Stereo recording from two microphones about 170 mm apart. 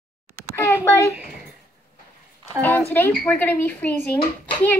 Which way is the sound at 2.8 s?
10° left (ahead or behind).